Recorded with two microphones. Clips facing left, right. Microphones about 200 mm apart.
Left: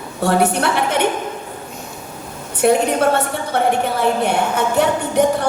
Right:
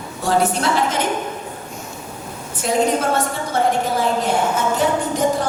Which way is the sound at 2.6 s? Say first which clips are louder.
Left 4 dB; 60° left (ahead or behind).